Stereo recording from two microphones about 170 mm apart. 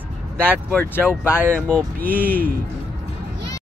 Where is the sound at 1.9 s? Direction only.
60° right (ahead or behind).